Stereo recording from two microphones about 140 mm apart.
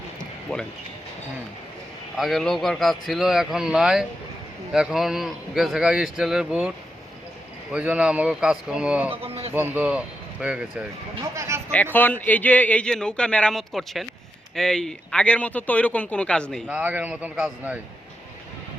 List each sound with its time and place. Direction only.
0.5 s a man's voice: 5° left (ahead or behind)
2.1 s a man's voice: centre (ahead or behind)
9.2 s a sound: 45° right (ahead or behind)
9.5 s a man's voice: 15° right (ahead or behind)
11.2 s speech: 20° right (ahead or behind)
11.7 s a man's voice: 10° left (ahead or behind)
16.6 s a man's voice: 10° right (ahead or behind)